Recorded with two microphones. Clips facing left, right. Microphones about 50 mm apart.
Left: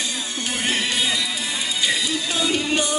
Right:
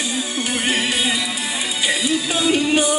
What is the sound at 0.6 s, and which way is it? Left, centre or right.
Music, centre.